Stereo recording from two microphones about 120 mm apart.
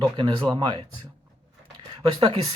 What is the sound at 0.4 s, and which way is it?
Speech, 45° right (ahead or behind).